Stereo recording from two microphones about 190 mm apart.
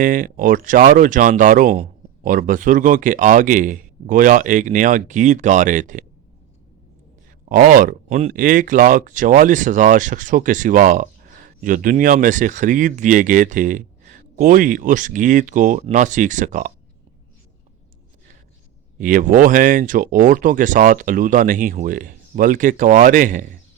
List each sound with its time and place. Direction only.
0.0 s speech: 45° right (ahead or behind)
7.4 s speech: 45° right (ahead or behind)
18.9 s speech: 45° right (ahead or behind)